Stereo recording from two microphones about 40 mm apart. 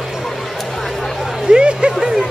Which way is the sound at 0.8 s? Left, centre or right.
Centre.